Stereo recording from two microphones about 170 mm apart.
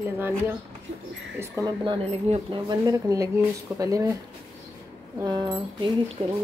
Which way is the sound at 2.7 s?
20° right (ahead or behind).